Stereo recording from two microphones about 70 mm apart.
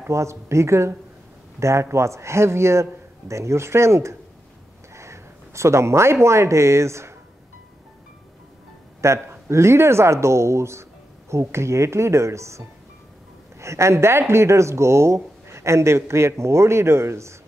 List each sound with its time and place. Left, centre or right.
0.1 s speech: right
9.0 s speech: right